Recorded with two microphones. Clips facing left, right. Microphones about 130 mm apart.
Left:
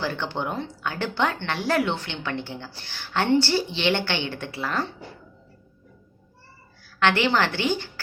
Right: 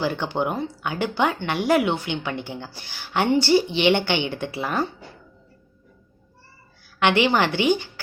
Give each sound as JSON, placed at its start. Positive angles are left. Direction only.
{"t": 0.0, "sound": "speech", "side_deg": -15}
{"t": 7.0, "sound": "speech", "side_deg": -15}